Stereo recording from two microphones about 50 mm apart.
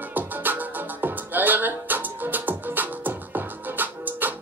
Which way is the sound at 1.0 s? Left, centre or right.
Right.